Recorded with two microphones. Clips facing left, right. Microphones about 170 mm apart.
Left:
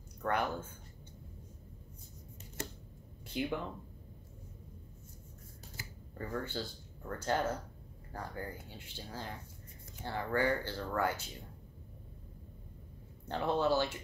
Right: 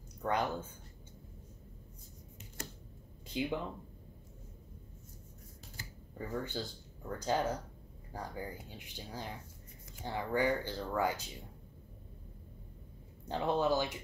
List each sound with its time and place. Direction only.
0.2 s speech: 15° right (ahead or behind)
3.3 s speech: 15° right (ahead or behind)
6.1 s speech: 10° right (ahead or behind)
13.3 s speech: 15° right (ahead or behind)